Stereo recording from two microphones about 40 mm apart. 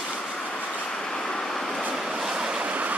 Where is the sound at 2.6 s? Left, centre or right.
Right.